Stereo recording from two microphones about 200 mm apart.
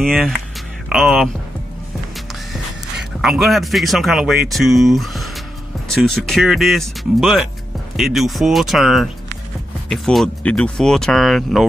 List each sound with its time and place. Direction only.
0.0 s speech: centre (ahead or behind)
2.5 s a man's voice: centre (ahead or behind)